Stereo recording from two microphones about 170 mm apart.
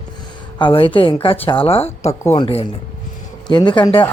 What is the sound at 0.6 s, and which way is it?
A man's voice, 30° left (ahead or behind).